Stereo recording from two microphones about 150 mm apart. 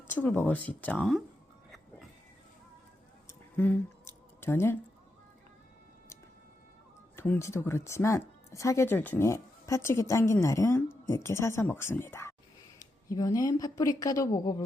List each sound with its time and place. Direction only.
0.1 s speech: 10° left (ahead or behind)
3.2 s a sound: 15° left (ahead or behind)
7.2 s speech: 15° left (ahead or behind)